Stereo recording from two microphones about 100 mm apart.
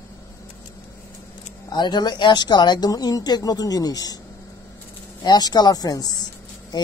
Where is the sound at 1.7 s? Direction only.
50° left (ahead or behind).